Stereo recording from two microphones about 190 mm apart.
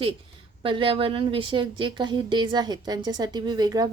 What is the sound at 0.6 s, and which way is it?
A woman's voice, 25° right (ahead or behind).